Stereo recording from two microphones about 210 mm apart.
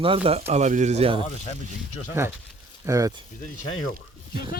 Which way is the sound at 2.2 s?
15° right (ahead or behind).